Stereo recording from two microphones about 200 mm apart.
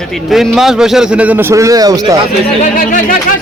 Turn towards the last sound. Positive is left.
turn(degrees=45)  # may be behind; listen again after turning